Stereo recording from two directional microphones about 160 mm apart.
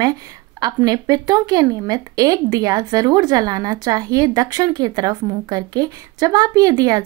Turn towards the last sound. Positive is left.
turn(degrees=-25)  # may be behind; listen again after turning